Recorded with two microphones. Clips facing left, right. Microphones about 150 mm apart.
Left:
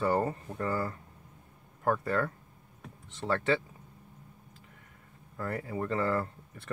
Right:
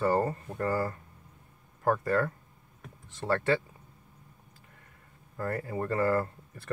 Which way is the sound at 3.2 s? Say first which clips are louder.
Right 2 dB; 10° right (ahead or behind).